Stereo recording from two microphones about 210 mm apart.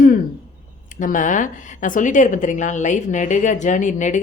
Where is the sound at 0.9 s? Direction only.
40° left (ahead or behind).